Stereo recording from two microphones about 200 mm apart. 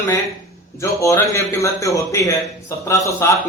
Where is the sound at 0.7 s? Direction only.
15° left (ahead or behind).